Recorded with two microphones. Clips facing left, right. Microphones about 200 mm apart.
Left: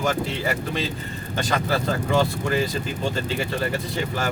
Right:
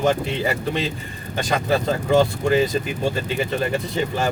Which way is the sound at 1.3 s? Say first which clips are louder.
Right 3 dB; 20° right (ahead or behind).